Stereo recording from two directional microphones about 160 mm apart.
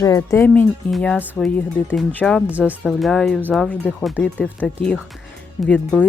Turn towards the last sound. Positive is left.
turn(degrees=10)  # may be behind; listen again after turning